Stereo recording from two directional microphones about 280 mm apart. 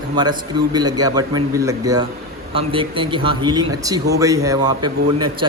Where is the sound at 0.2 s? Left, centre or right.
Centre.